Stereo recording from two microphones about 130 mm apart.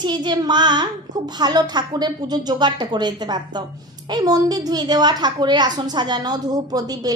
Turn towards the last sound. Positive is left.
turn(degrees=-30)  # may be behind; listen again after turning